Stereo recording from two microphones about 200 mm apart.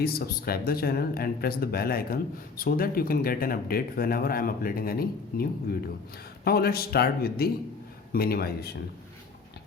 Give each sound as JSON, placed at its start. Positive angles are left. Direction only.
{"t": 0.0, "sound": "speech", "side_deg": 50}